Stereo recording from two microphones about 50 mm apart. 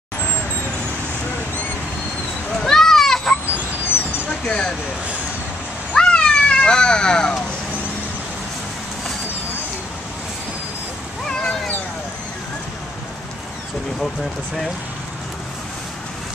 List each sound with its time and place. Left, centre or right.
2.5 s children playing: centre
4.3 s a sound: left
5.9 s cat: centre
11.2 s cat: centre